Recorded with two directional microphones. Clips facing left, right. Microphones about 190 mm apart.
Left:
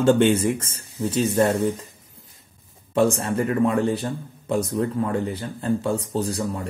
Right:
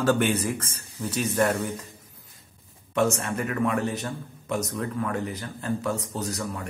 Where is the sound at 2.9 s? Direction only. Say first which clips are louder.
Left 4 dB; 30° left (ahead or behind).